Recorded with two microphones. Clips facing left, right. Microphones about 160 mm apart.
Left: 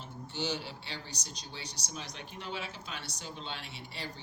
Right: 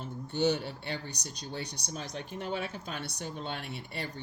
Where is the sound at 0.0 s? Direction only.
55° right (ahead or behind).